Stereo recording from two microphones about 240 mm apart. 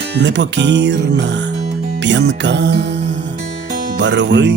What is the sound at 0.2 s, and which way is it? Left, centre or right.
Music, right.